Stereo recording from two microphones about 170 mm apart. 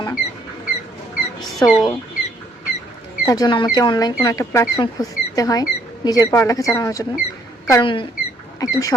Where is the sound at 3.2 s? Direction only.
20° left (ahead or behind).